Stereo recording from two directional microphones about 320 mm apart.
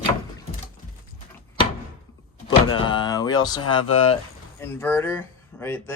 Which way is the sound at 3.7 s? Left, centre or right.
Centre.